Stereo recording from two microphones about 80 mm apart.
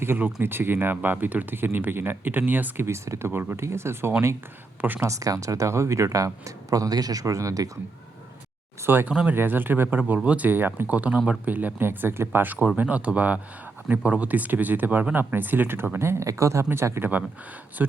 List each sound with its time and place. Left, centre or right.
0.0 s speech: right
2.8 s speech: right
5.0 s speech: right
8.9 s speech: right
17.8 s speech: right